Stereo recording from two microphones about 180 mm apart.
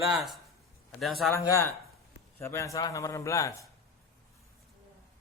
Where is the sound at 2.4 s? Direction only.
15° left (ahead or behind).